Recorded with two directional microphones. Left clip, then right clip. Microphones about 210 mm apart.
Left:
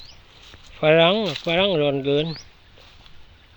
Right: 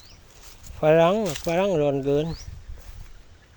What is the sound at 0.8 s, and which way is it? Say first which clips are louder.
Speech: left 2 dB; centre (ahead or behind).